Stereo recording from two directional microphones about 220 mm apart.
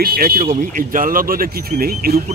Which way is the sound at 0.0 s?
40° right (ahead or behind).